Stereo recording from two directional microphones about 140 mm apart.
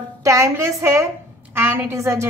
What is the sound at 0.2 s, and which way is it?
A woman's voice, 20° right (ahead or behind).